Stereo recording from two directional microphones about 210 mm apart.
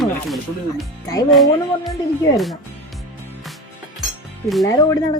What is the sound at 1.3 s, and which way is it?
Speech, centre (ahead or behind).